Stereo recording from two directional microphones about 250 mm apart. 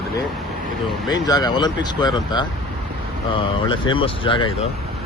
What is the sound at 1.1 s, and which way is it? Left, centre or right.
Speech, centre.